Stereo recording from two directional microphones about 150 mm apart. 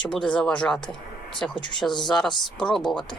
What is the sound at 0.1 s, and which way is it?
Speech, 5° left (ahead or behind).